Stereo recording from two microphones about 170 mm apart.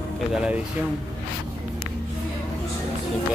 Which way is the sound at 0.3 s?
5° right (ahead or behind).